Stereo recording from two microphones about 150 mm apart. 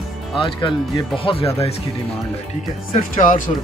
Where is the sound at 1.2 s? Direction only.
40° left (ahead or behind).